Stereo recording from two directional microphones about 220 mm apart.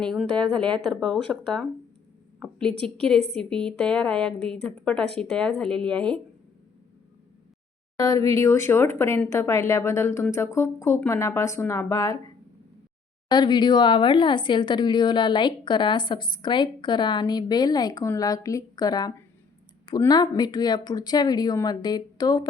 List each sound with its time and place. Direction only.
0.0 s a woman's voice: centre (ahead or behind)
2.8 s a woman's voice: 5° left (ahead or behind)
7.9 s speech: 15° left (ahead or behind)
13.3 s a woman's voice: 20° left (ahead or behind)